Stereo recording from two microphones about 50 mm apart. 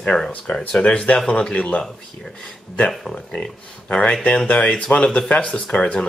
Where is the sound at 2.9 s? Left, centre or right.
Centre.